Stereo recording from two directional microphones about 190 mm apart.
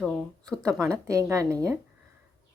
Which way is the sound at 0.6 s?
15° right (ahead or behind).